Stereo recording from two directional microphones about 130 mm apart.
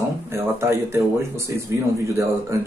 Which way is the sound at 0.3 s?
20° right (ahead or behind).